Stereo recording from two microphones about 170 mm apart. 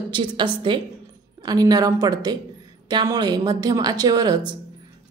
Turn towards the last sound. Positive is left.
turn(degrees=-25)  # may be behind; listen again after turning